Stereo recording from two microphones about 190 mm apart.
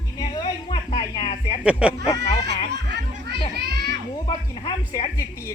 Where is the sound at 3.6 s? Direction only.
60° right (ahead or behind).